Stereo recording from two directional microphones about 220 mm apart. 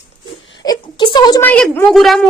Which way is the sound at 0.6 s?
20° left (ahead or behind).